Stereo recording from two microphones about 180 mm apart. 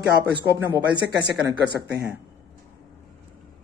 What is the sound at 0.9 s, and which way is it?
Speech, 25° right (ahead or behind).